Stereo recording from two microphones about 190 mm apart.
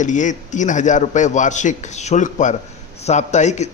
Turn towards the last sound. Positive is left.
turn(degrees=35)  # may be behind; listen again after turning